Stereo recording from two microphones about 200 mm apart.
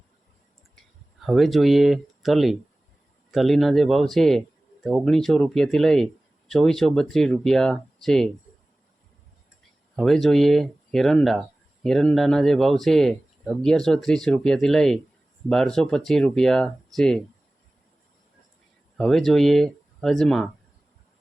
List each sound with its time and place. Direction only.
1.2 s speech: centre (ahead or behind)
9.9 s speech: centre (ahead or behind)
18.9 s speech: centre (ahead or behind)